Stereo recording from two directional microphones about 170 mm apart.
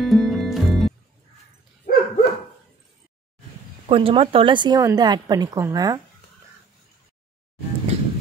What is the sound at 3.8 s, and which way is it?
A woman's voice, 30° right (ahead or behind).